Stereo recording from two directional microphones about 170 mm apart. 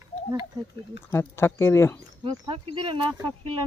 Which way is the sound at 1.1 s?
15° left (ahead or behind).